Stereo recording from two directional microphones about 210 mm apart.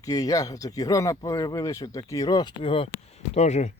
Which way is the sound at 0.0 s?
15° left (ahead or behind).